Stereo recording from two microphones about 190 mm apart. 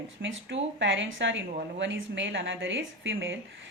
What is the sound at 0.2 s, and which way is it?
Speech, 75° right (ahead or behind).